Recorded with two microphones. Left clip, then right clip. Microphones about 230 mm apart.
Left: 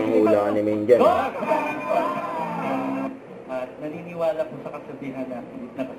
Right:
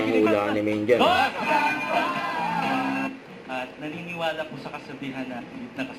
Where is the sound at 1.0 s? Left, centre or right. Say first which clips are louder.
Left 1 dB; right.